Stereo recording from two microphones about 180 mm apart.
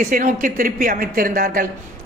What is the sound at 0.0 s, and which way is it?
Speech, 50° right (ahead or behind).